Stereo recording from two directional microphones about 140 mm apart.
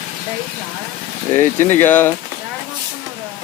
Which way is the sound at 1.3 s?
15° left (ahead or behind).